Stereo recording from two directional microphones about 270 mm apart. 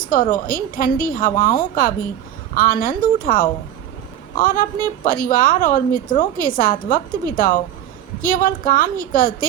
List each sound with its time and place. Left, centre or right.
0.0 s a woman's voice: left